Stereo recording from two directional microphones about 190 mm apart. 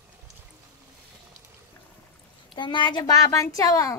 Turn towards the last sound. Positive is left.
turn(degrees=15)  # may be behind; listen again after turning